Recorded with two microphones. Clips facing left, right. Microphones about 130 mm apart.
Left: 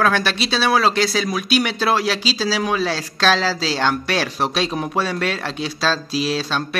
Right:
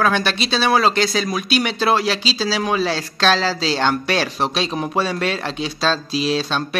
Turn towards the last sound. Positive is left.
turn(degrees=0)  # may be behind; listen again after turning